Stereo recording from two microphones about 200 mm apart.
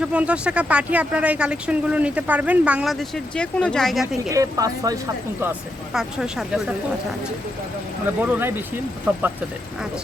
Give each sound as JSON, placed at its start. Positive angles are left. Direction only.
{"t": 0.0, "sound": "speech", "side_deg": -5}
{"t": 4.3, "sound": "speech", "side_deg": -15}
{"t": 5.9, "sound": "speech", "side_deg": -5}
{"t": 8.2, "sound": "speech", "side_deg": -10}